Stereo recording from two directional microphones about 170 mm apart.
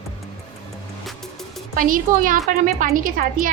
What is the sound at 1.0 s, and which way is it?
Music, centre (ahead or behind).